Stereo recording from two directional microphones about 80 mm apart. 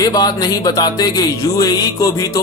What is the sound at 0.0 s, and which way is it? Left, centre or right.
A man's voice, left.